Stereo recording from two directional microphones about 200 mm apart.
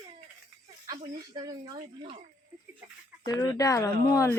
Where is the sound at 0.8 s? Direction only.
20° right (ahead or behind).